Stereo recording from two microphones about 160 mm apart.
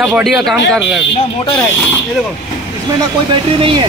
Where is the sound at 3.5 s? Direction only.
35° right (ahead or behind).